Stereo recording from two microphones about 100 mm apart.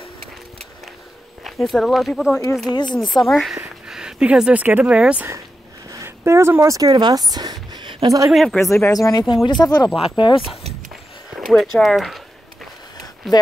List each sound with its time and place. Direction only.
1.4 s speech: centre (ahead or behind)
2.7 s speech: 50° left (ahead or behind)
3.0 s speech: centre (ahead or behind)
5.9 s a sound: 30° right (ahead or behind); by 8.1 s 55° right (ahead or behind)
8.3 s speech: centre (ahead or behind)
8.5 s speech: 25° left (ahead or behind)
8.9 s speech: 40° left (ahead or behind)
9.9 s speech: 75° left (ahead or behind)
11.3 s speech: centre (ahead or behind)